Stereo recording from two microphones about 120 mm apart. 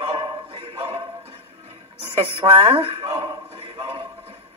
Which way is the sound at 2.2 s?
50° right (ahead or behind).